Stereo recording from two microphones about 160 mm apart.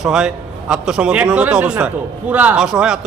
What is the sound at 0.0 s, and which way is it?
A man's voice, 5° right (ahead or behind).